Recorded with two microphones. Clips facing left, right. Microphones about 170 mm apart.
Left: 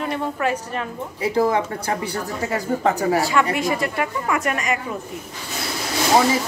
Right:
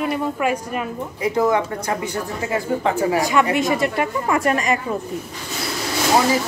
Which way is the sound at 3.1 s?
20° right (ahead or behind).